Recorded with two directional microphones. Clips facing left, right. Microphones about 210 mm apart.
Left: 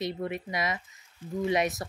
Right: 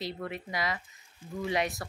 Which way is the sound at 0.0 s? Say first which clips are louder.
Left 4 dB; 20° left (ahead or behind).